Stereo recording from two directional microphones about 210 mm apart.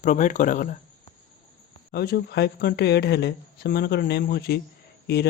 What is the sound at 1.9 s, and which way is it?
Speech, 50° left (ahead or behind).